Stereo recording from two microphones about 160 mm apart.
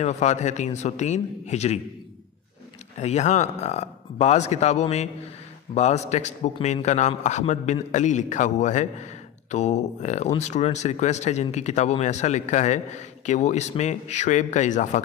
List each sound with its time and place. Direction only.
0.0 s a man's voice: 45° left (ahead or behind)
3.0 s a man's voice: 45° left (ahead or behind)